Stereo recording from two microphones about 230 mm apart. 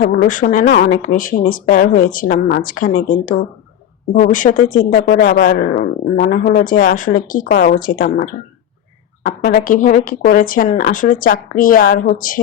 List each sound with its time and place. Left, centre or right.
0.0 s a woman's voice: left